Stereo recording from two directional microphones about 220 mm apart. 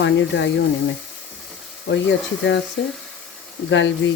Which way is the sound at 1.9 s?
55° left (ahead or behind).